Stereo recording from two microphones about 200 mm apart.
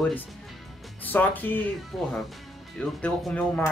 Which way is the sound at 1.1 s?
10° left (ahead or behind).